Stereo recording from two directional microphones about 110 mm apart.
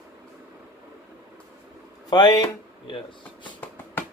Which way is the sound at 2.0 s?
40° left (ahead or behind).